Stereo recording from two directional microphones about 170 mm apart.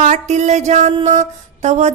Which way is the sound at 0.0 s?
45° right (ahead or behind).